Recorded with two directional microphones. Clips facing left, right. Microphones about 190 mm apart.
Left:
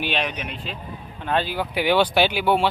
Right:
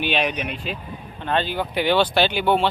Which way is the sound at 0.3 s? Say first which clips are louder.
Right 4 dB; 15° right (ahead or behind).